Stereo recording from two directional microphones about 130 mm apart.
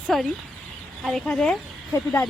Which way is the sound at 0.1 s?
Centre (ahead or behind).